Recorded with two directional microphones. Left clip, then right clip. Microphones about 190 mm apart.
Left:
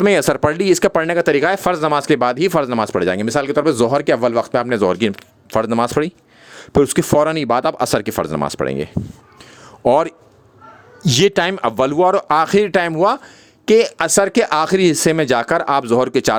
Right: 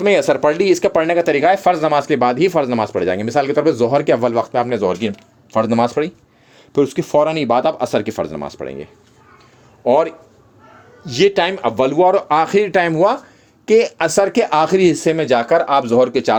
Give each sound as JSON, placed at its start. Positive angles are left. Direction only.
{"t": 0.0, "sound": "speech", "side_deg": 40}